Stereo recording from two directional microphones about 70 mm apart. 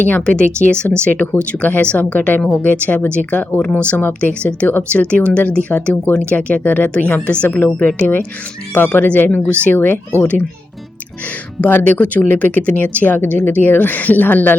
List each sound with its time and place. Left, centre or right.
0.3 s a woman's voice: centre
3.6 s a woman's voice: centre
11.6 s speech: left